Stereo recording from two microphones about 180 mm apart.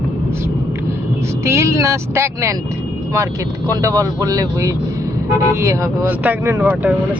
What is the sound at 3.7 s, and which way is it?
Speech, 20° right (ahead or behind).